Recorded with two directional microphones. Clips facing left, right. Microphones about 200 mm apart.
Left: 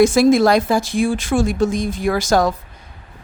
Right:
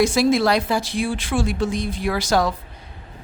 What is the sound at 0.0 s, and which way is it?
Speech, 50° left (ahead or behind).